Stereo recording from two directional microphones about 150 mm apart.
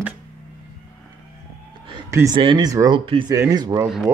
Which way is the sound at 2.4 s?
30° right (ahead or behind).